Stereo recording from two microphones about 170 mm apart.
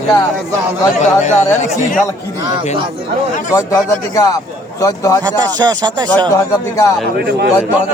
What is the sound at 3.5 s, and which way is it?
Speech, 20° left (ahead or behind).